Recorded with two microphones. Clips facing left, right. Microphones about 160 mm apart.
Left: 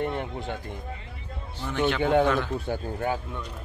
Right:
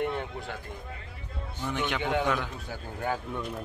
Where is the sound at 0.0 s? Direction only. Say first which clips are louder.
Left 2 dB; 25° left (ahead or behind).